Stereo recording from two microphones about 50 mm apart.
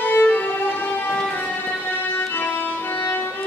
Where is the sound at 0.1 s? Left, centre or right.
Left.